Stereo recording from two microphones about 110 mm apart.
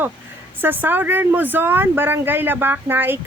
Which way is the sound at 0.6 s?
20° right (ahead or behind).